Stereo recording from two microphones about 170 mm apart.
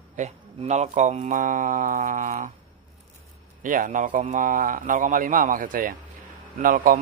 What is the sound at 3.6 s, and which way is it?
A man's voice, 50° right (ahead or behind).